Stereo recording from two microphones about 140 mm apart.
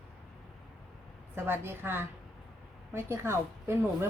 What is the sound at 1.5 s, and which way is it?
Speech, 15° right (ahead or behind).